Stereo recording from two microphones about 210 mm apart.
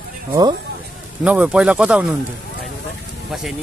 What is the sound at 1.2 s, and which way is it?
Speech, 5° right (ahead or behind).